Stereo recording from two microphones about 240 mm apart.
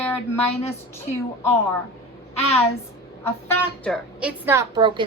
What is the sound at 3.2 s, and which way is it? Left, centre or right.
Speech, centre.